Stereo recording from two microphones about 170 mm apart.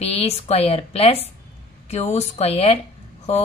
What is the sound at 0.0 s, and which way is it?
Speech, 35° left (ahead or behind).